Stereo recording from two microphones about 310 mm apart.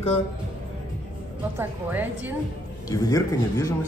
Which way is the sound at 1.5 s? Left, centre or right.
Centre.